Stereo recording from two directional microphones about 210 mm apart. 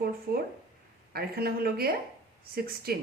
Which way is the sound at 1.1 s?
45° right (ahead or behind).